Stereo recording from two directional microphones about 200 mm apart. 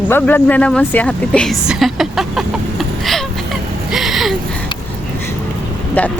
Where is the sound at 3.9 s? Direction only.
Centre (ahead or behind).